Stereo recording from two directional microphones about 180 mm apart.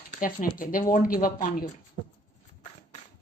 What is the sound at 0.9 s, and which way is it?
Speech, 50° left (ahead or behind).